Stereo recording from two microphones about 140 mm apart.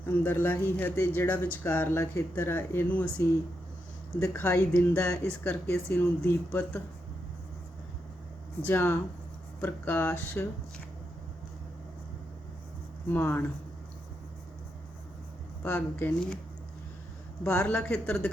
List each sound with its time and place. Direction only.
0.2 s speech: 15° left (ahead or behind)
8.6 s speech: 15° left (ahead or behind)
13.1 s speech: 15° left (ahead or behind)
15.6 s speech: 15° left (ahead or behind)
17.6 s speech: 10° left (ahead or behind)